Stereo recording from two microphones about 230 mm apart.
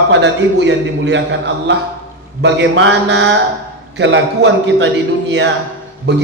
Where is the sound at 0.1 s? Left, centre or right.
Right.